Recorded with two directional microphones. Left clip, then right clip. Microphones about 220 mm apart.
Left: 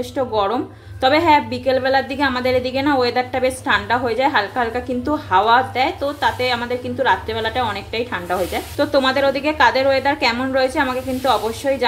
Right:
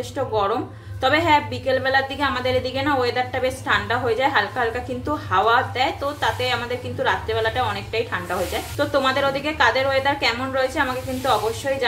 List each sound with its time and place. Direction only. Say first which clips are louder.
0.3 s a woman's voice: even; 30° left (ahead or behind)